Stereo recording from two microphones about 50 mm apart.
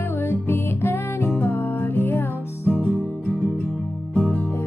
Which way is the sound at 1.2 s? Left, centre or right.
Left.